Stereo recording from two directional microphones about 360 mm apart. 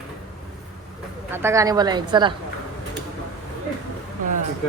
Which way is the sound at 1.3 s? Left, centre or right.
Centre.